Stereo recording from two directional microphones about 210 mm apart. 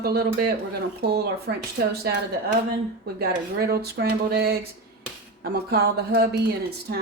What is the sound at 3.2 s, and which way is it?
Speech, 50° right (ahead or behind).